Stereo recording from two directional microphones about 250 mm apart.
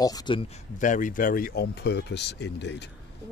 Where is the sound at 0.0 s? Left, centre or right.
Centre; by 2.9 s left.